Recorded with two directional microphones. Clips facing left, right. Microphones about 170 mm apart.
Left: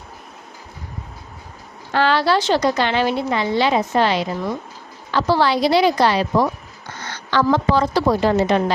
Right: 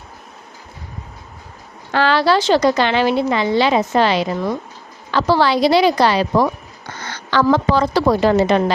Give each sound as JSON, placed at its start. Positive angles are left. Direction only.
{"t": 1.9, "sound": "a woman's voice", "side_deg": -90}